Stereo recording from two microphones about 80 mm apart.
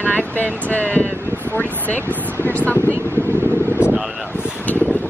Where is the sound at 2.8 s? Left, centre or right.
Right.